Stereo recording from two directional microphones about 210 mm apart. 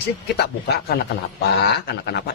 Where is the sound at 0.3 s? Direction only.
50° left (ahead or behind).